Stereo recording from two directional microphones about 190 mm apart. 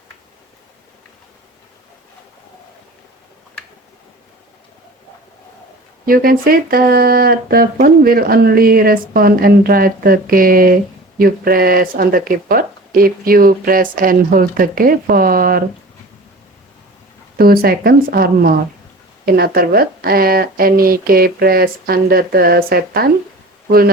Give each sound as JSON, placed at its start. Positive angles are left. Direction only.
{"t": 6.1, "sound": "speech", "side_deg": -50}
{"t": 17.3, "sound": "speech", "side_deg": -50}